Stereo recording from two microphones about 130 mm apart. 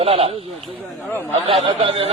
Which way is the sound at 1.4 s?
45° right (ahead or behind).